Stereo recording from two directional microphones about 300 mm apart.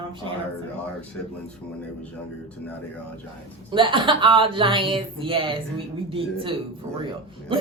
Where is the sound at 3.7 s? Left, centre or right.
Centre.